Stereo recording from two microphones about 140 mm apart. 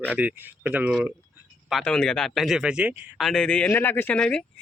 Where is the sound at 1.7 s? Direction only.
5° left (ahead or behind); by 3.1 s 10° right (ahead or behind).